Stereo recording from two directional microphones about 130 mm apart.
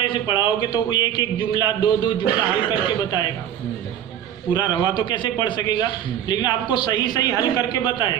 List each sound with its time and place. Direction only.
0.0 s a man's voice: 40° left (ahead or behind)
4.6 s a man's voice: 35° left (ahead or behind)